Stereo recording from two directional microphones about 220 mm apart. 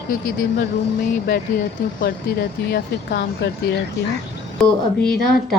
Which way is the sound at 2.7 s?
45° left (ahead or behind).